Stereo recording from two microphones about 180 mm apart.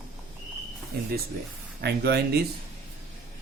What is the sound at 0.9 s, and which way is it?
Speech, 60° right (ahead or behind).